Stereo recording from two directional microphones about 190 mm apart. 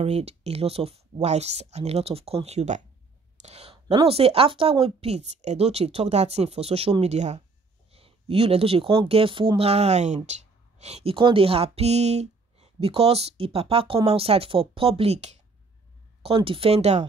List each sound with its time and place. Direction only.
0.0 s speech: 35° right (ahead or behind)